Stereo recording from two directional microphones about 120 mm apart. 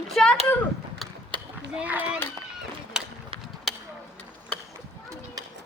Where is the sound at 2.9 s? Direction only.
5° right (ahead or behind).